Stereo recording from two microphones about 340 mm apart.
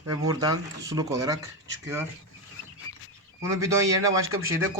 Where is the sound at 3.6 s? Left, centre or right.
Centre.